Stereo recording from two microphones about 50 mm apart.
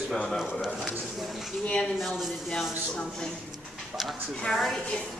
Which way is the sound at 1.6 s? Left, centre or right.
Centre.